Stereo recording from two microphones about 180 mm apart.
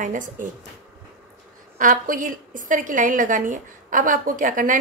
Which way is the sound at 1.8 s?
50° right (ahead or behind).